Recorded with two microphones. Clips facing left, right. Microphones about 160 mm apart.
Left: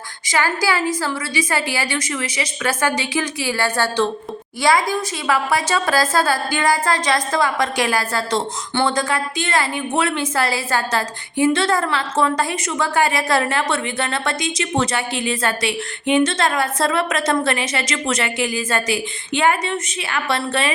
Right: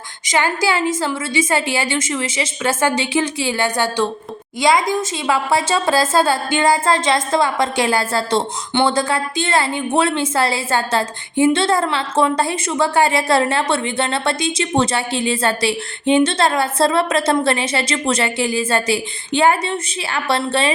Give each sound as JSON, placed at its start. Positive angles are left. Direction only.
{"t": 0.3, "sound": "a woman's voice", "side_deg": -25}